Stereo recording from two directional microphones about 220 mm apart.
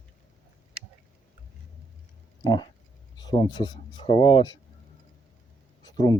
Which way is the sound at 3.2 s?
20° left (ahead or behind).